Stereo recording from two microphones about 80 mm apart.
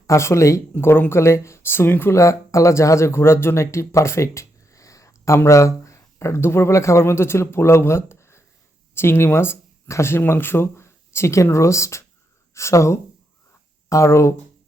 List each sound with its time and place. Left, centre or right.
0.1 s speech: left
0.7 s speech: left
2.1 s speech: left